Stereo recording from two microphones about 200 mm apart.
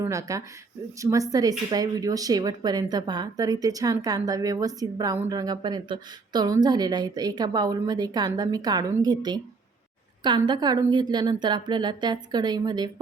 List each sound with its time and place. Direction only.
0.0 s speech: 15° right (ahead or behind)